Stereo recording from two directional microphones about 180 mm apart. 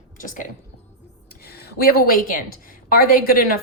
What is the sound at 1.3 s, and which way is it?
Speech, 60° left (ahead or behind).